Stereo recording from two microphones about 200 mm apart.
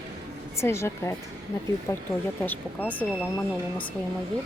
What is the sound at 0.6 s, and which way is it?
A woman's voice, 15° left (ahead or behind).